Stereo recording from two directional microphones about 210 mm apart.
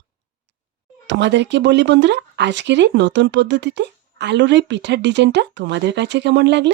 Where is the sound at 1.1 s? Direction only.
55° right (ahead or behind).